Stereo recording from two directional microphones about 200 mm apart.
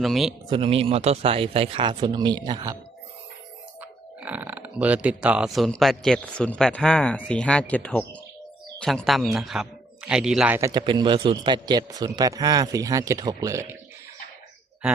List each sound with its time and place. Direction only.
0.0 s speech: centre (ahead or behind)
0.4 s speech: 25° right (ahead or behind)
3.8 s speech: 10° right (ahead or behind)